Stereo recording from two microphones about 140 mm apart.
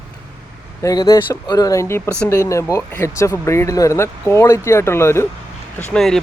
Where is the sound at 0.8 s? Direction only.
25° left (ahead or behind).